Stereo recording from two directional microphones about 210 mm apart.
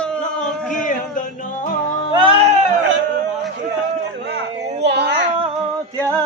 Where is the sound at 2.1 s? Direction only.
25° right (ahead or behind).